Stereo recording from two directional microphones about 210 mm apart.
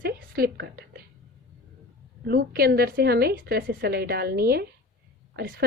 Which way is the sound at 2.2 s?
45° right (ahead or behind).